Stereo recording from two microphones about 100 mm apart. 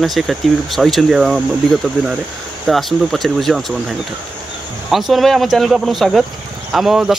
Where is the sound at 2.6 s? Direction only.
Centre (ahead or behind).